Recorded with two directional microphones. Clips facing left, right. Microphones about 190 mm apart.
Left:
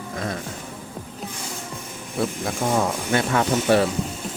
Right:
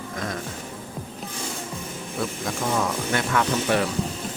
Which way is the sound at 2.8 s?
30° left (ahead or behind).